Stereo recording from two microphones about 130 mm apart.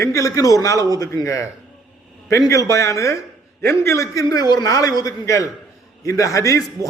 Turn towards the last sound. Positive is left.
turn(degrees=25)  # may be behind; listen again after turning